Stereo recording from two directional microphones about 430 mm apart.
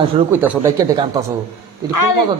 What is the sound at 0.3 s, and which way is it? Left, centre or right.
Speech, centre.